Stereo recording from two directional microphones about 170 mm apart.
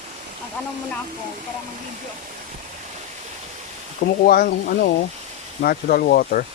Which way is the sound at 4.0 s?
60° left (ahead or behind).